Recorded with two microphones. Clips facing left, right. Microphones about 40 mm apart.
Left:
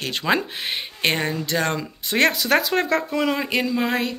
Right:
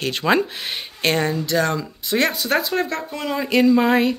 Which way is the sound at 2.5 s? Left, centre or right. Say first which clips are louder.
Left 2 dB; left.